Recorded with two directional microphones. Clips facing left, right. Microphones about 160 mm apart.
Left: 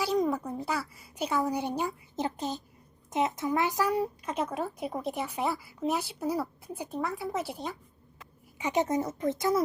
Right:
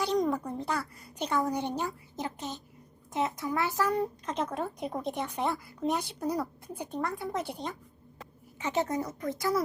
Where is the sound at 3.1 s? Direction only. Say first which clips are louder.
Left 3 dB; 20° left (ahead or behind).